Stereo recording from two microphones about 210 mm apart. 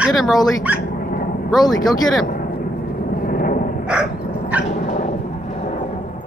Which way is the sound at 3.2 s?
40° left (ahead or behind).